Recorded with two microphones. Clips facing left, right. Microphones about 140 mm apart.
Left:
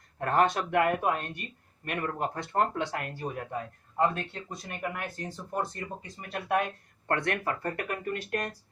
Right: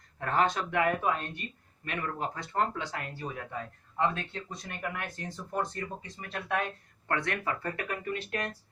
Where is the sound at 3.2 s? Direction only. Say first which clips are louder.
Left 3 dB; 40° left (ahead or behind).